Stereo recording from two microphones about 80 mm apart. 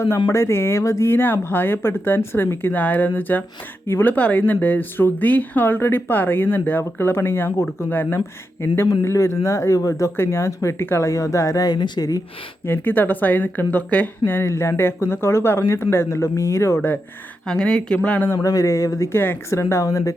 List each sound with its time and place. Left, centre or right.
0.3 s speech: left
4.1 s speech: centre; by 12.2 s left
12.6 s speech: left
14.4 s speech: left
17.4 s speech: centre
18.3 s speech: left
19.1 s speech: left